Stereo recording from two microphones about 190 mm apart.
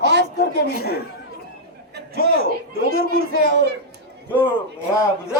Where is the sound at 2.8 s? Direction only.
55° right (ahead or behind).